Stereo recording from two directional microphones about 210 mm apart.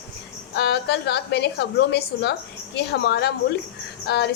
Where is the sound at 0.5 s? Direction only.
55° left (ahead or behind).